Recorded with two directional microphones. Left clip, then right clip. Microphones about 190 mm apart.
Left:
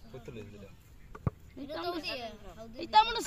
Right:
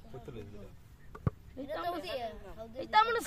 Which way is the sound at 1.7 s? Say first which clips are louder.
Even; 25° right (ahead or behind).